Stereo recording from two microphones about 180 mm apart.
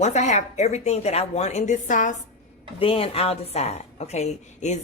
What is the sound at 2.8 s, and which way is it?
A woman's voice, 30° left (ahead or behind).